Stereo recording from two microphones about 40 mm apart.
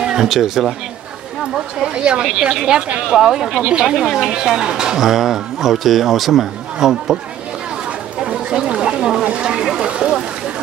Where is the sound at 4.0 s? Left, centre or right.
Centre.